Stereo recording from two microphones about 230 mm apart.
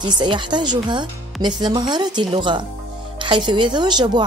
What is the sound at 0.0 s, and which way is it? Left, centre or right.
A woman's voice, right.